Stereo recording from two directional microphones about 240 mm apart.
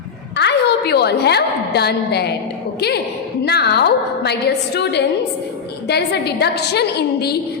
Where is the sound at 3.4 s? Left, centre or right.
Left.